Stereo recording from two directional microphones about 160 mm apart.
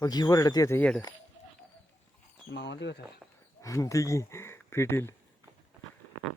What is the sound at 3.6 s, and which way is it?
Speech, 20° left (ahead or behind).